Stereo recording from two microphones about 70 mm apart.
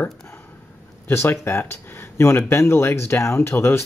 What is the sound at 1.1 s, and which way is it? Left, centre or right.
Speech, left.